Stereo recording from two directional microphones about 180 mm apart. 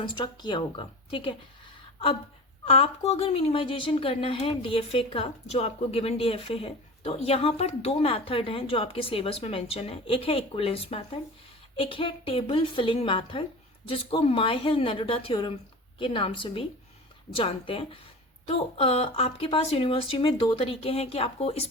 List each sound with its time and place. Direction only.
0.0 s a woman's voice: 25° left (ahead or behind)
2.6 s a woman's voice: 30° left (ahead or behind)